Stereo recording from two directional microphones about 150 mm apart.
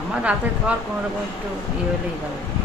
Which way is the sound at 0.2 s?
10° right (ahead or behind).